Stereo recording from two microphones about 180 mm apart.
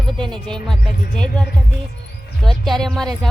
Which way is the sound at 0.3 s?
5° left (ahead or behind).